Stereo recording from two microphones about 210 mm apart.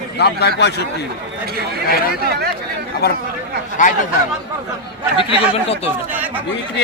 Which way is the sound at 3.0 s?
50° left (ahead or behind).